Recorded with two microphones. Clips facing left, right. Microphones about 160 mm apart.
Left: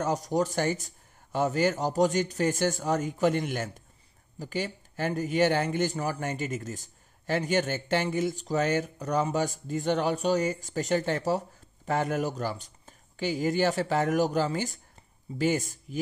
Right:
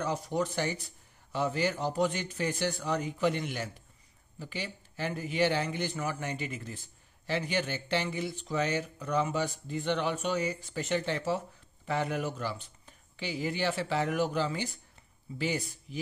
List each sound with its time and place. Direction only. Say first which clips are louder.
0.0 s a man's voice: left 4 dB; 40° left (ahead or behind)